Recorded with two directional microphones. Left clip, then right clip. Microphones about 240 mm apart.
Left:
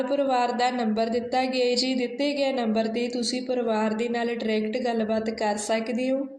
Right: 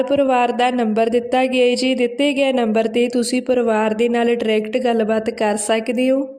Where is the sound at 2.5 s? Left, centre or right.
Right.